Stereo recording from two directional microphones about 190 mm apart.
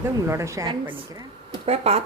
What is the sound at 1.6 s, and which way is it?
Speech, 35° right (ahead or behind).